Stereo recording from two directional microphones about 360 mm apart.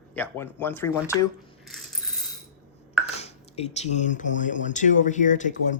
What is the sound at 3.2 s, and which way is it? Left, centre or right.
Speech, centre.